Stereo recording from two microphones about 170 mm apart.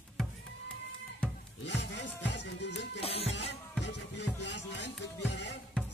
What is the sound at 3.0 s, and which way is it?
Music, 35° left (ahead or behind).